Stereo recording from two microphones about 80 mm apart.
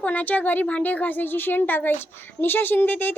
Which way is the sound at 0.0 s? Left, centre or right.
Centre.